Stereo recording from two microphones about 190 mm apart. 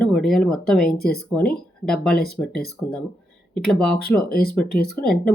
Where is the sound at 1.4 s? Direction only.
5° left (ahead or behind).